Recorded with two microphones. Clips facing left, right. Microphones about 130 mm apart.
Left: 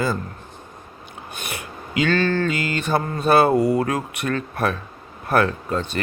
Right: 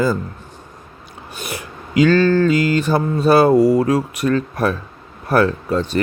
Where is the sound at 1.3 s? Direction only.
35° right (ahead or behind).